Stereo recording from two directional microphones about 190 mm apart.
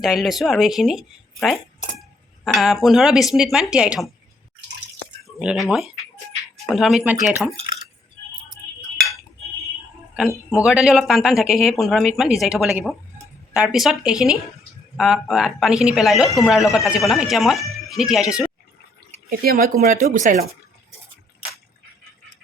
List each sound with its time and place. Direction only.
0.0 s speech: centre (ahead or behind)
5.4 s speech: centre (ahead or behind)
10.6 s speech: 5° right (ahead or behind)
19.3 s speech: 50° right (ahead or behind)